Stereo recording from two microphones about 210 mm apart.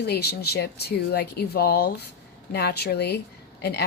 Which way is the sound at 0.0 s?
50° left (ahead or behind).